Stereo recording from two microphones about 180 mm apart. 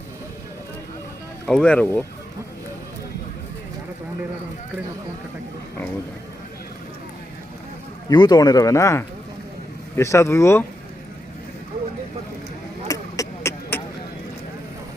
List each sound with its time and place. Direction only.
1.5 s speech: 5° left (ahead or behind)
8.1 s speech: 25° left (ahead or behind)
12.9 s beatboxing: 15° left (ahead or behind)